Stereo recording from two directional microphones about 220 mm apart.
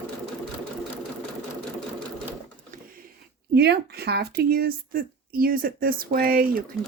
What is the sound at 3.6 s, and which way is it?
Speech, 45° right (ahead or behind).